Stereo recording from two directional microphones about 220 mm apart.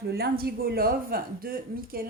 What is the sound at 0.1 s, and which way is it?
Speech, 45° right (ahead or behind).